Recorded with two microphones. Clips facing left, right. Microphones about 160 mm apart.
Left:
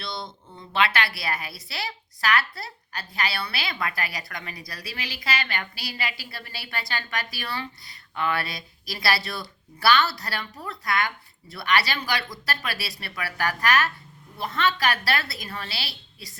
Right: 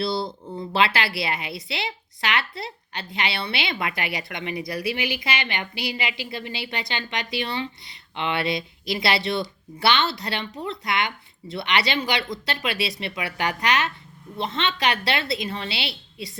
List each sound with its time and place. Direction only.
0.0 s a woman's voice: 30° right (ahead or behind)